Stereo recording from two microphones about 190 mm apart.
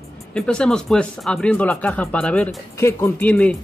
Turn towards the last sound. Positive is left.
turn(degrees=5)  # may be behind; listen again after turning